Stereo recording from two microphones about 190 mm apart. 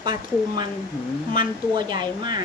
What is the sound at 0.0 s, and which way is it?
Speech, 25° right (ahead or behind).